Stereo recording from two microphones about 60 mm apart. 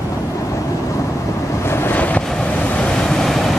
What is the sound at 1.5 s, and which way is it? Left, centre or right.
Vehicle, left.